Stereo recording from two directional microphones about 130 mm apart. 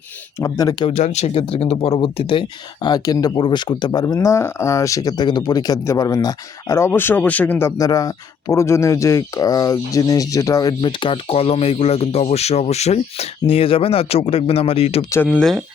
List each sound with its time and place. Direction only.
0.3 s speech: 25° left (ahead or behind)
0.9 s speech: 60° left (ahead or behind); by 7.7 s 15° left (ahead or behind)
7.8 s speech: 30° left (ahead or behind); by 15.0 s 50° left (ahead or behind)
15.4 s speech: centre (ahead or behind)